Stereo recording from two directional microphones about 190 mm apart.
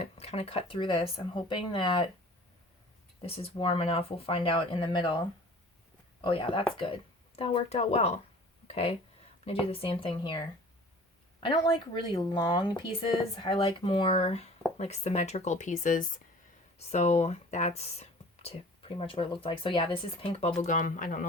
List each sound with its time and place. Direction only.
0.0 s speech: 35° left (ahead or behind)
3.2 s speech: 30° left (ahead or behind)
6.2 s speech: 25° left (ahead or behind)
11.4 s speech: 25° left (ahead or behind); by 21.2 s 45° left (ahead or behind)